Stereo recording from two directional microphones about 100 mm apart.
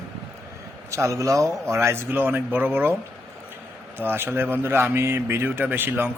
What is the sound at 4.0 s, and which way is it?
A man's voice, 20° right (ahead or behind).